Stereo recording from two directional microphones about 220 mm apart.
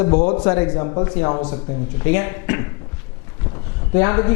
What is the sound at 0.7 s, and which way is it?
Speech, 20° left (ahead or behind).